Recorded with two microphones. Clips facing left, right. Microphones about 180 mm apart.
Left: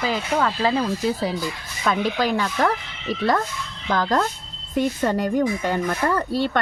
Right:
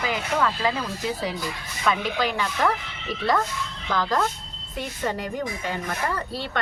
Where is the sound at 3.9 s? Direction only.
45° left (ahead or behind).